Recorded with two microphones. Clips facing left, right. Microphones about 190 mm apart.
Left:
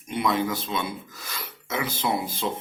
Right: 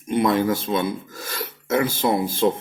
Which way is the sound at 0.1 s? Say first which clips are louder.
Right 6 dB; 50° right (ahead or behind).